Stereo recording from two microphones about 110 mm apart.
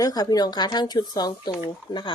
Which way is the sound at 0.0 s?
35° left (ahead or behind).